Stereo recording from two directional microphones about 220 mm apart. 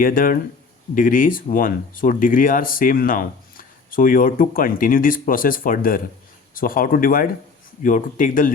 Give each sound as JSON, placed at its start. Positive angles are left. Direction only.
{"t": 0.0, "sound": "speech", "side_deg": 40}